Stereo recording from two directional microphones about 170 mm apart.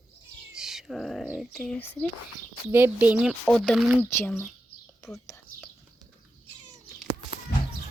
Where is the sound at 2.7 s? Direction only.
10° right (ahead or behind).